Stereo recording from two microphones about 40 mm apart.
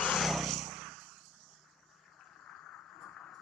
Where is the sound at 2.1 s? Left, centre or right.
Centre.